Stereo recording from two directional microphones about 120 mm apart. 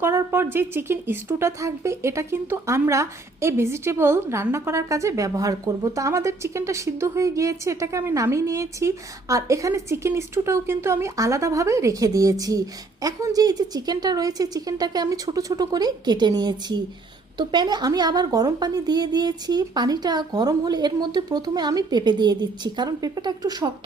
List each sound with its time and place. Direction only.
0.0 s a woman's voice: 20° right (ahead or behind)